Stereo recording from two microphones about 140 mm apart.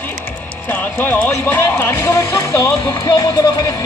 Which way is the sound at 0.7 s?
15° left (ahead or behind).